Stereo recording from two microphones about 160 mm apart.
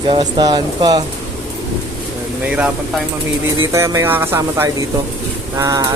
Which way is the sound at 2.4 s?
10° right (ahead or behind).